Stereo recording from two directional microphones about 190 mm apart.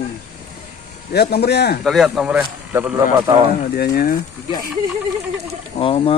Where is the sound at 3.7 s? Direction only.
55° left (ahead or behind).